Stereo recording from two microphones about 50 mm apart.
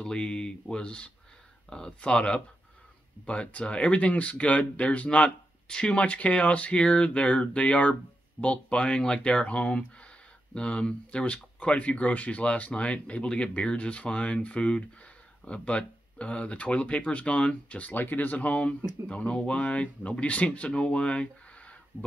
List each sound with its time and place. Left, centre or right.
0.0 s speech: centre
17.9 s speech: left
21.9 s speech: right